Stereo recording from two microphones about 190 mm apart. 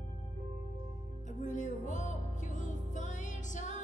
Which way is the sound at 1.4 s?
40° left (ahead or behind).